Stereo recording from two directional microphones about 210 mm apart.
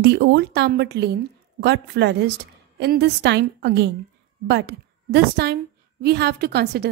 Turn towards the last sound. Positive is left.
turn(degrees=-50)  # may be behind; listen again after turning